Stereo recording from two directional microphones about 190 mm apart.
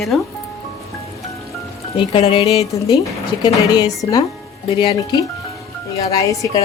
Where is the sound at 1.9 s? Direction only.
30° left (ahead or behind).